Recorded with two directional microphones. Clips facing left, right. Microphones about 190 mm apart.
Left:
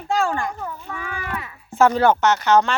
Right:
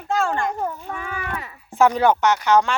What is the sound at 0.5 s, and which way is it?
Speech, 40° right (ahead or behind).